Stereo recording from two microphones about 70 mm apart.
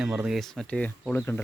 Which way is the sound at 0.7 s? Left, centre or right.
Centre.